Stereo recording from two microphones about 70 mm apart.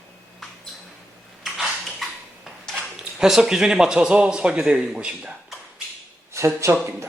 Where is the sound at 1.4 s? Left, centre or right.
Centre.